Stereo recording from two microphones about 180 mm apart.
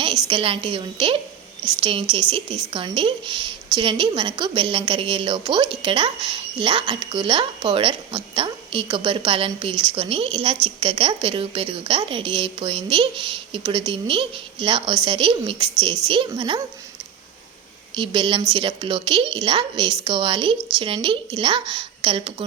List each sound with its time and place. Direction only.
0.3 s a woman's voice: 30° right (ahead or behind)
17.9 s a woman's voice: 30° right (ahead or behind)